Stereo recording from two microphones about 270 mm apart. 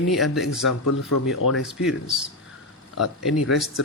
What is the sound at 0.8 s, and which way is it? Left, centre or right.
Speech, left.